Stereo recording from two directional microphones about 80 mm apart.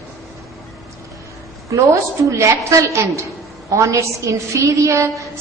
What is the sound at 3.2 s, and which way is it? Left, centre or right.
A woman's voice, right.